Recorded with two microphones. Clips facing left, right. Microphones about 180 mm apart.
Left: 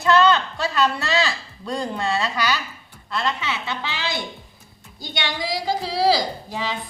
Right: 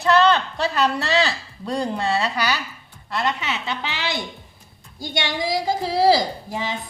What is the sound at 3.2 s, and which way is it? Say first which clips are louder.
Speech: right 1 dB; 20° right (ahead or behind).